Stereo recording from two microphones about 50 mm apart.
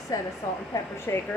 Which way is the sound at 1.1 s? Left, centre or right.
Left.